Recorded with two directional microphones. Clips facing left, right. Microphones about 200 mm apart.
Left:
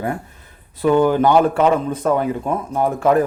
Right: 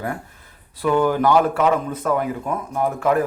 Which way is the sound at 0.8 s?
20° left (ahead or behind).